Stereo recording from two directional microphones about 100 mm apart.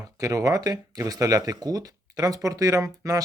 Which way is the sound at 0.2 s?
35° right (ahead or behind).